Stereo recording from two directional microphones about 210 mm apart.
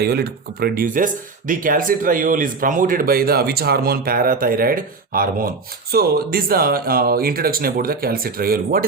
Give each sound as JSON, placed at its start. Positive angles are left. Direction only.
{"t": 0.0, "sound": "speech", "side_deg": -50}